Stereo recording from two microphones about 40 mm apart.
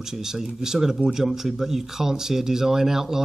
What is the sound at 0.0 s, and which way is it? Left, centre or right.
Speech, centre.